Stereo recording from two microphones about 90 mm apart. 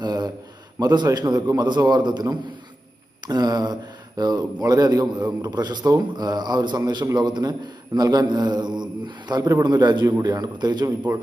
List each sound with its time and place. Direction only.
0.0 s a sound: 50° right (ahead or behind)
0.8 s a man's voice: 45° right (ahead or behind)
3.2 s a man's voice: 45° right (ahead or behind)
10.1 s a man's voice: 40° right (ahead or behind)
11.1 s a man's voice: 35° right (ahead or behind)